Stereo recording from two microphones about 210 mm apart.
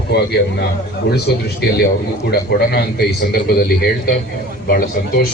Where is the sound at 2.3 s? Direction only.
50° left (ahead or behind).